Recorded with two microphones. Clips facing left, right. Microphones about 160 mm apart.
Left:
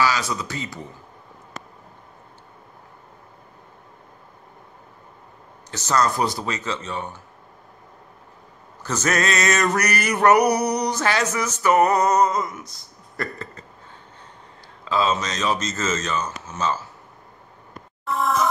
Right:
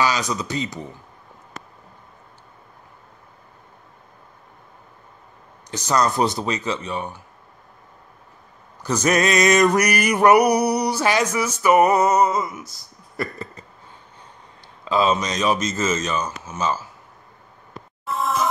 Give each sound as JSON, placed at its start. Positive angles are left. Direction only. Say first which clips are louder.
{"t": 0.0, "sound": "speech", "louder": "right 1 dB", "side_deg": -20}
{"t": 5.7, "sound": "male singing", "louder": "right 1 dB", "side_deg": -15}
{"t": 8.8, "sound": "male singing", "louder": "right 4 dB", "side_deg": -15}
{"t": 14.9, "sound": "male singing", "louder": "right 2 dB", "side_deg": -15}